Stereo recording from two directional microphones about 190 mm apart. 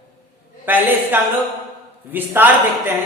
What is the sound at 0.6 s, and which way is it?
A woman's voice, 10° right (ahead or behind).